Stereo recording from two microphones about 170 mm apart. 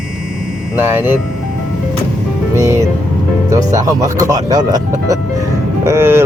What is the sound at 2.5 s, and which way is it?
Speech, 20° right (ahead or behind).